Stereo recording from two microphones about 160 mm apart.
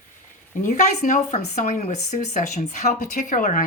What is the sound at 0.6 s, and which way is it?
Speech, 50° left (ahead or behind).